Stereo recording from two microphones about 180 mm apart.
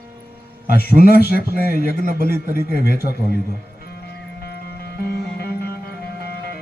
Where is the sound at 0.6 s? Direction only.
60° left (ahead or behind).